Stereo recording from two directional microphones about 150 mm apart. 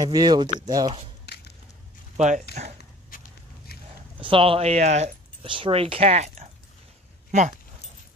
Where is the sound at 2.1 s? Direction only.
50° right (ahead or behind).